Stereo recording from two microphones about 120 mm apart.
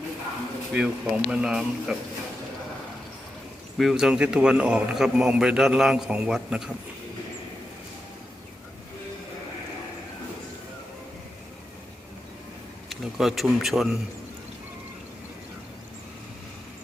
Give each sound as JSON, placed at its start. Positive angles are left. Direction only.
{"t": 0.7, "sound": "speech", "side_deg": -5}
{"t": 3.8, "sound": "a man's voice", "side_deg": -5}
{"t": 12.9, "sound": "a man's voice", "side_deg": 0}